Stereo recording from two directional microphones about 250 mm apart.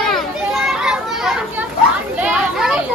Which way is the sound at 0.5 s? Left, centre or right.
Centre.